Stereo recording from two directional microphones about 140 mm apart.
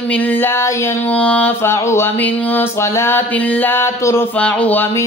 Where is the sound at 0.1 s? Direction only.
10° left (ahead or behind).